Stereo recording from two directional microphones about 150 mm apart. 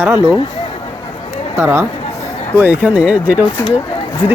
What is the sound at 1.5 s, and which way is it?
Speech, 15° right (ahead or behind).